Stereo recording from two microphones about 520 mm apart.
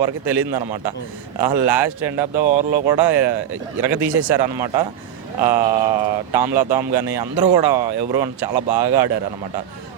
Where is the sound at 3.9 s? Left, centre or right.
Right.